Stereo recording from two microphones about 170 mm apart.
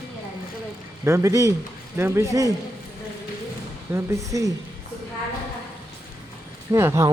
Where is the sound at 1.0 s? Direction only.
15° right (ahead or behind).